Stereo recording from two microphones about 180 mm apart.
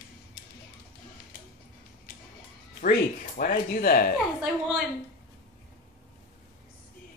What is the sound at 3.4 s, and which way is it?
Speech, 50° left (ahead or behind).